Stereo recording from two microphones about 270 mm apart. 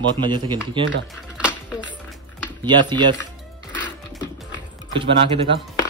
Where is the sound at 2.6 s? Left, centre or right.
Centre.